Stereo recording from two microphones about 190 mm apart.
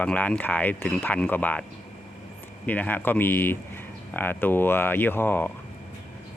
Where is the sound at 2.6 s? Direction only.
10° left (ahead or behind).